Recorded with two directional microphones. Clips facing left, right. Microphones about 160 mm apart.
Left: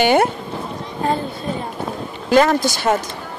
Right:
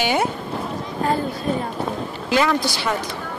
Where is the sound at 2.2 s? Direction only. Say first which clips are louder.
Left 5 dB; 45° left (ahead or behind).